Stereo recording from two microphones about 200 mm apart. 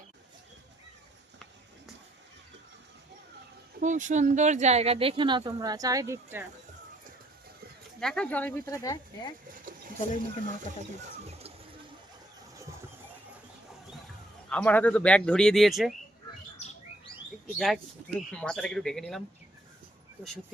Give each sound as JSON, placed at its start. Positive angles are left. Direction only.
{"t": 3.8, "sound": "speech", "side_deg": -40}
{"t": 7.9, "sound": "speech", "side_deg": 5}
{"t": 9.6, "sound": "a sound", "side_deg": -40}
{"t": 11.0, "sound": "speech", "side_deg": -30}
{"t": 14.5, "sound": "speech", "side_deg": 10}
{"t": 17.4, "sound": "speech", "side_deg": 0}